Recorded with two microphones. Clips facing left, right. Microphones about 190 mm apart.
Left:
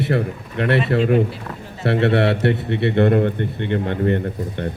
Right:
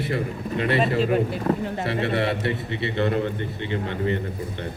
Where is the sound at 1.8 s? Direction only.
65° left (ahead or behind).